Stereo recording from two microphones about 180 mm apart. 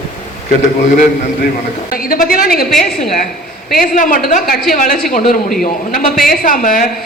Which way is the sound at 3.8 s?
50° left (ahead or behind).